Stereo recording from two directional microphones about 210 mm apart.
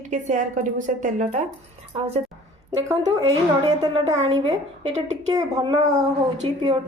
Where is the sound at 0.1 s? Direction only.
35° right (ahead or behind).